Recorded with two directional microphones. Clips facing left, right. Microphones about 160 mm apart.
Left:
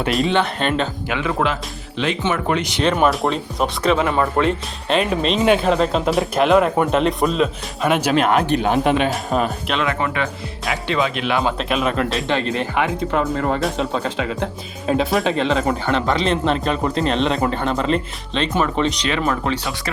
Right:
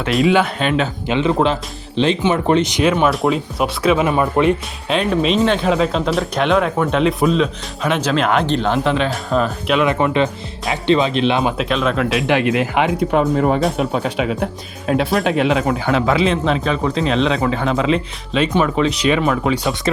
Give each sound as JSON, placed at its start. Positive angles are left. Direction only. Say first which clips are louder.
{"t": 0.1, "sound": "speech", "louder": "right 5 dB", "side_deg": -5}
{"t": 1.0, "sound": "speech", "louder": "right 8 dB", "side_deg": -25}
{"t": 2.9, "sound": "speech", "louder": "right 2 dB", "side_deg": 0}
{"t": 4.9, "sound": "speech", "louder": "right 2 dB", "side_deg": 0}
{"t": 9.8, "sound": "speech", "louder": "right 6 dB", "side_deg": -20}
{"t": 11.5, "sound": "speech", "louder": "right 2 dB", "side_deg": 0}
{"t": 12.2, "sound": "speech", "louder": "right 5 dB", "side_deg": -15}
{"t": 14.8, "sound": "speech", "louder": "right 1 dB", "side_deg": 0}